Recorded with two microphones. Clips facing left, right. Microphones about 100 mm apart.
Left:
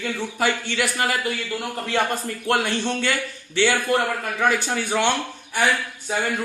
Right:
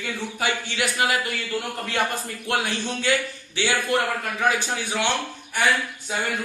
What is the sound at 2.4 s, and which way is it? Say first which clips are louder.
Speech: left 4 dB; 55° left (ahead or behind).